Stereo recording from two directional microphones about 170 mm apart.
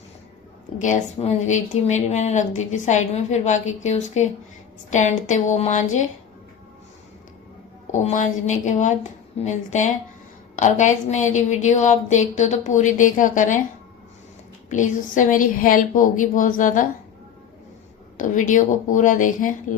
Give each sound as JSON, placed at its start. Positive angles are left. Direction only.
{"t": 0.8, "sound": "speech", "side_deg": 45}
{"t": 7.9, "sound": "speech", "side_deg": 45}
{"t": 14.7, "sound": "speech", "side_deg": 50}
{"t": 18.2, "sound": "speech", "side_deg": 50}